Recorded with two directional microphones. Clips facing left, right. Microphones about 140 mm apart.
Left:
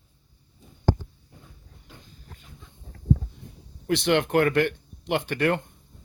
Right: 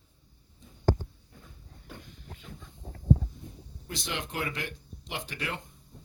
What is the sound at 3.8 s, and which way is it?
Speech, 70° left (ahead or behind).